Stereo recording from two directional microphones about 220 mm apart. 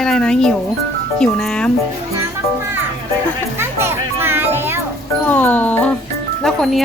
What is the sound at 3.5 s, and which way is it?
Music, 10° right (ahead or behind).